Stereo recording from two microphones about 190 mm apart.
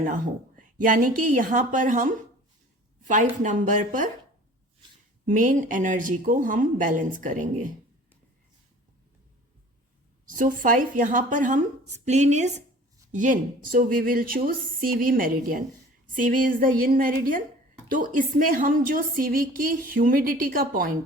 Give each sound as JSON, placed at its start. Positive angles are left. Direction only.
{"t": 0.0, "sound": "a woman's voice", "side_deg": -45}
{"t": 5.2, "sound": "a woman's voice", "side_deg": -45}
{"t": 10.2, "sound": "a woman's voice", "side_deg": -45}